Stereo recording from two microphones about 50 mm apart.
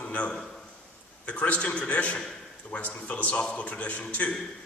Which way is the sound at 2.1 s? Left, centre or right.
Centre.